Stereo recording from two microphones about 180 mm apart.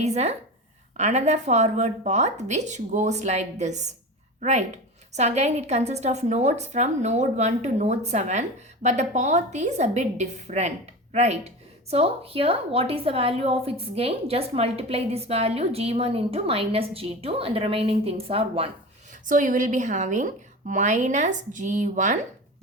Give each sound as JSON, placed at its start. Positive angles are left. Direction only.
{"t": 0.0, "sound": "speech", "side_deg": -35}
{"t": 19.1, "sound": "a woman's voice", "side_deg": -45}